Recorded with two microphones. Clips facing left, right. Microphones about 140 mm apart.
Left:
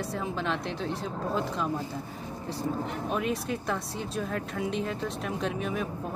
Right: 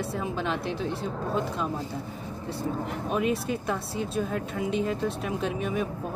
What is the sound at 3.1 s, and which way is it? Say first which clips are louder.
Speech: right 4 dB; 5° right (ahead or behind).